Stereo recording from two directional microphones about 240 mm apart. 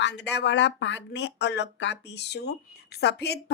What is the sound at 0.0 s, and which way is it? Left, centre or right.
Speech, left.